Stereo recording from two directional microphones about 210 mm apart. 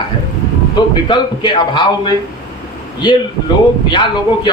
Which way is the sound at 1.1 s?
20° left (ahead or behind).